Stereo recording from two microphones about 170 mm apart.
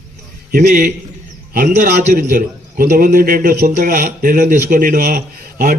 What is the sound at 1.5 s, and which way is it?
A man's voice, 50° right (ahead or behind).